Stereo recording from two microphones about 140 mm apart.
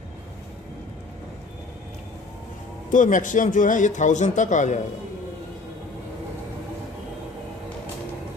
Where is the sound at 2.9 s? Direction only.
70° left (ahead or behind).